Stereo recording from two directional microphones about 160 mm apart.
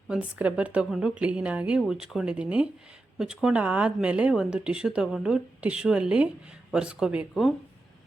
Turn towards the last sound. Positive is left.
turn(degrees=-5)  # may be behind; listen again after turning